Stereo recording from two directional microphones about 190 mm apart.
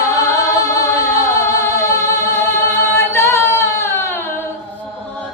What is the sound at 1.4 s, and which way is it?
Music, 15° left (ahead or behind).